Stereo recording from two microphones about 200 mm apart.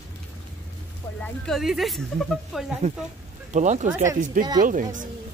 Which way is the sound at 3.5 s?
35° right (ahead or behind).